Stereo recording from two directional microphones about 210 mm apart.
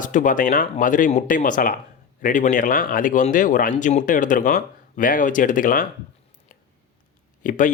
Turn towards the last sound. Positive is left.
turn(degrees=40)  # may be behind; listen again after turning